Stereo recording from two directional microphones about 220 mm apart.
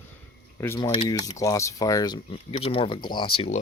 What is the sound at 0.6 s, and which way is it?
Speech, 10° left (ahead or behind).